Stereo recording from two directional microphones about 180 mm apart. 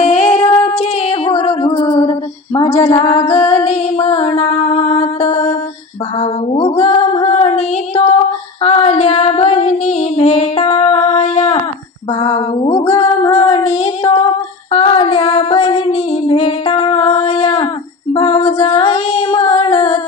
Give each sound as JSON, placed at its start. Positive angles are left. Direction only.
{"t": 0.0, "sound": "female singing", "side_deg": 40}
{"t": 12.2, "sound": "a sound", "side_deg": 30}
{"t": 12.9, "sound": "female singing", "side_deg": 30}